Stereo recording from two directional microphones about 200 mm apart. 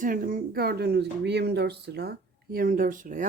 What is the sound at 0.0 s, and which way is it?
Speech, 45° right (ahead or behind).